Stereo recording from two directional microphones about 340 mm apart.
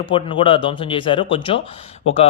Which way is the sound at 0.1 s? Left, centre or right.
Centre.